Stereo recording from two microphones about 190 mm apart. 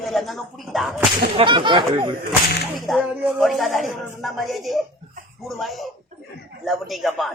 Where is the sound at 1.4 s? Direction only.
25° right (ahead or behind).